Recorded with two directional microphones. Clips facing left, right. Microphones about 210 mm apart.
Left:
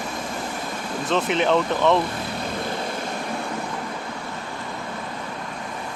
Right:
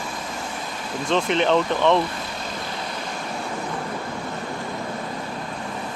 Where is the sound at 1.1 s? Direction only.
5° left (ahead or behind).